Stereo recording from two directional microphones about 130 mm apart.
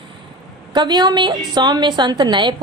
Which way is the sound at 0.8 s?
35° right (ahead or behind).